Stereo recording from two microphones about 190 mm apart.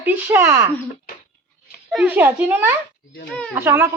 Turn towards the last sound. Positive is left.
turn(degrees=-15)  # may be behind; listen again after turning